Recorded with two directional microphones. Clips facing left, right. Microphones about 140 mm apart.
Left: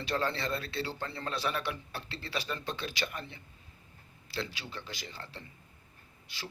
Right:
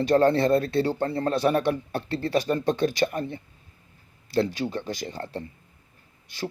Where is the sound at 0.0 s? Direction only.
45° right (ahead or behind).